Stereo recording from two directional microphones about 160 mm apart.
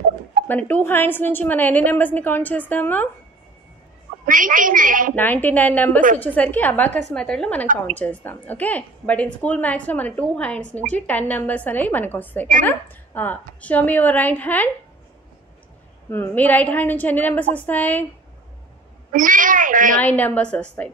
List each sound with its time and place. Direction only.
0.5 s a woman's voice: 10° left (ahead or behind)
4.3 s a woman's voice: 55° right (ahead or behind)
5.1 s a woman's voice: 10° left (ahead or behind)
16.1 s a woman's voice: 10° left (ahead or behind)
19.1 s a woman's voice: 55° right (ahead or behind)
20.0 s a woman's voice: 10° left (ahead or behind)